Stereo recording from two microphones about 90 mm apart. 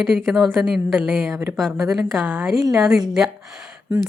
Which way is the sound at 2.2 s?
20° right (ahead or behind).